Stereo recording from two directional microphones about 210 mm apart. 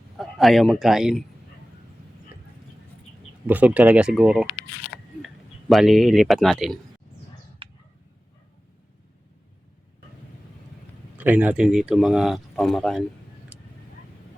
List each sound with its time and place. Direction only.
0.2 s speech: centre (ahead or behind)
3.4 s speech: 5° right (ahead or behind)
7.6 s a sound: 25° right (ahead or behind)
11.2 s speech: 5° right (ahead or behind)
13.5 s vehicle: 10° right (ahead or behind)